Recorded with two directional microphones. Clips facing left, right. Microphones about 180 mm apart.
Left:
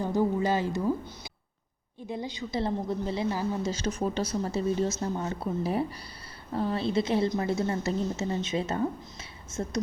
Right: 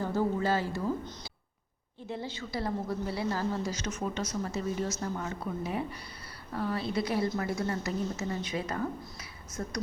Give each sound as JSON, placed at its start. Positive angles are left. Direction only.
{"t": 0.0, "sound": "a woman's voice", "side_deg": 15}
{"t": 3.7, "sound": "a woman's voice", "side_deg": 30}